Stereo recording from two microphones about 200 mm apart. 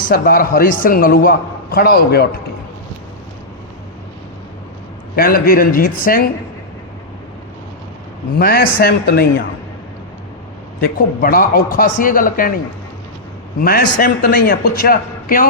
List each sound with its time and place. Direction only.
0.1 s a man's voice: 45° left (ahead or behind)
5.1 s a man's voice: 45° left (ahead or behind)
8.4 s a man's voice: 50° left (ahead or behind)
11.2 s a man's voice: 45° left (ahead or behind)
13.6 s a man's voice: 45° left (ahead or behind)